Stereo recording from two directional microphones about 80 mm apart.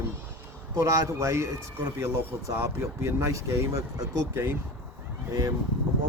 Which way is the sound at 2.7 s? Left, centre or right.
Right.